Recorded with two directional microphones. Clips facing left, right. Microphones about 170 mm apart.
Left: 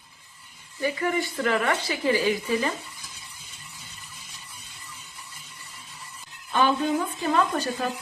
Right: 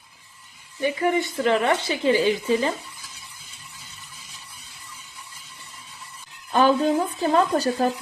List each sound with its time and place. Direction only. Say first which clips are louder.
0.8 s speech: right 4 dB; 20° right (ahead or behind)
6.5 s speech: right 4 dB; 40° right (ahead or behind)